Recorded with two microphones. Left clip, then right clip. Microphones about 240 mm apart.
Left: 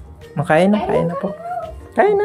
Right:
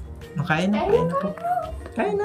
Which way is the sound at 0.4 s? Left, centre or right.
Centre.